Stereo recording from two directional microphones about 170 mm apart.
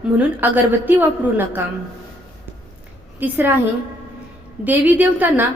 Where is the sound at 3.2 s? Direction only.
10° right (ahead or behind).